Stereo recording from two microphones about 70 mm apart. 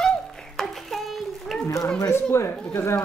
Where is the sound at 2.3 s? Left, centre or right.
Left.